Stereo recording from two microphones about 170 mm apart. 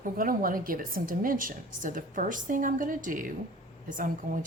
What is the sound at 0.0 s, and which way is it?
A woman's voice, 55° right (ahead or behind).